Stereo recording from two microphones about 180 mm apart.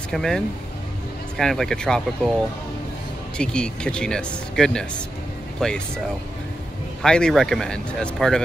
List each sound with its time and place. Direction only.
0.1 s speech: centre (ahead or behind)
1.4 s speech: centre (ahead or behind)
3.3 s speech: 5° left (ahead or behind)
7.0 s speech: 5° left (ahead or behind)